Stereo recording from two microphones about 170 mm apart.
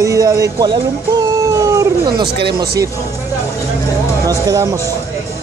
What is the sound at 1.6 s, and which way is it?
Howl, 20° right (ahead or behind).